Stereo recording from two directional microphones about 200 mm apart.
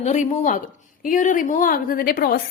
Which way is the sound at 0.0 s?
35° left (ahead or behind).